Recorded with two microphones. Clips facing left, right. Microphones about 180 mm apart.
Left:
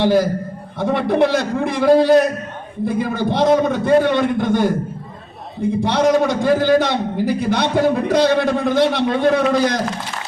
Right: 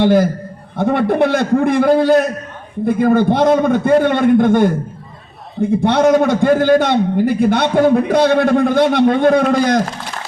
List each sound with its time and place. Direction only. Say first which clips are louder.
0.0 s a man's voice: right 3 dB; 55° right (ahead or behind)
5.8 s a man's voice: right 3 dB; 55° right (ahead or behind)